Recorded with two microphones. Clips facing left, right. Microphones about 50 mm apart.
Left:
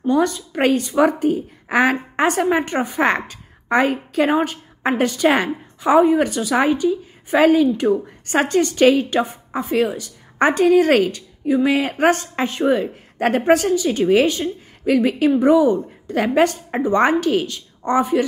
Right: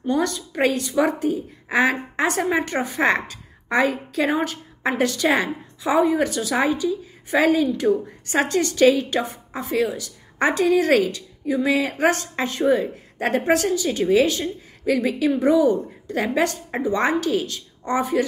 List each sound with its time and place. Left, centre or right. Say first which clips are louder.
0.5 s a woman's voice: left 3 dB; left
15.0 s a woman's voice: left 4 dB; left